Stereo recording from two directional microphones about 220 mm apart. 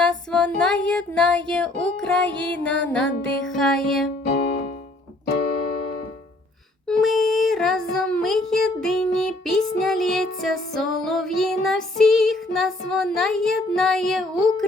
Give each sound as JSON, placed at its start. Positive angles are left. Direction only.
{"t": 0.0, "sound": "music", "side_deg": 5}
{"t": 4.3, "sound": "music", "side_deg": 40}
{"t": 6.8, "sound": "child singing", "side_deg": 0}